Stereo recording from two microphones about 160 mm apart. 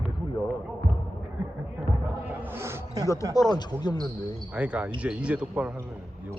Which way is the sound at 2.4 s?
15° right (ahead or behind).